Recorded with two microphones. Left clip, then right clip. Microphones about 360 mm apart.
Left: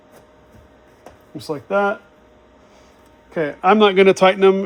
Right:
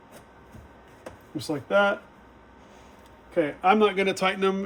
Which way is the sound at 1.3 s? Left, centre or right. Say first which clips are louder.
Left 3 dB; centre.